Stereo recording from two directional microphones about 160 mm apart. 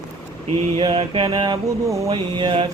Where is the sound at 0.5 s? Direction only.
35° right (ahead or behind).